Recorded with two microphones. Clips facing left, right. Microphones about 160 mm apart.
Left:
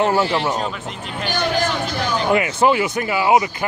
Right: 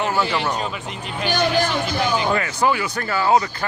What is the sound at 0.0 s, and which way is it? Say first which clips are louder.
Speech: left 4 dB; 30° left (ahead or behind).